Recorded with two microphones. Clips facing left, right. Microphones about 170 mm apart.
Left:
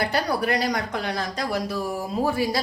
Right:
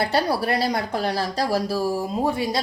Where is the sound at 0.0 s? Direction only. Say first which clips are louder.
Right 2 dB; 30° right (ahead or behind).